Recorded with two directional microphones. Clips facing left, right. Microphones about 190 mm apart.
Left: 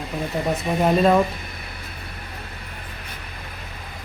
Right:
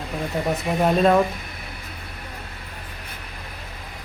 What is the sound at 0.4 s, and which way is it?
Speech, centre (ahead or behind).